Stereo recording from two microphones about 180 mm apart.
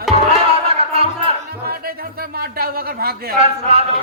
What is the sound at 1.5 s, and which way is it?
Speech, 60° right (ahead or behind).